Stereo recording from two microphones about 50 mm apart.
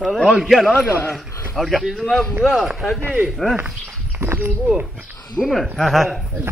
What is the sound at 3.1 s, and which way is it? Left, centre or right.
Speech, right.